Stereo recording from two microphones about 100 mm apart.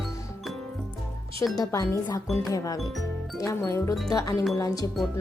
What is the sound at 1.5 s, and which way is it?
Speech, 35° left (ahead or behind).